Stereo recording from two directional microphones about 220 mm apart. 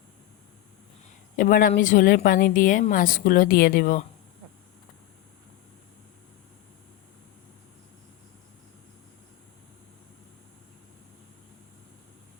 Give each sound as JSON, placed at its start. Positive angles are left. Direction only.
{"t": 1.4, "sound": "a woman's voice", "side_deg": 40}